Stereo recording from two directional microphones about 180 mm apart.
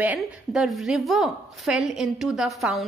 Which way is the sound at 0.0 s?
5° right (ahead or behind).